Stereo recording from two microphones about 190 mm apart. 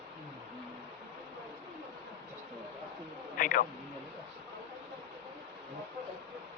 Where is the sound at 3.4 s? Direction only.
50° left (ahead or behind).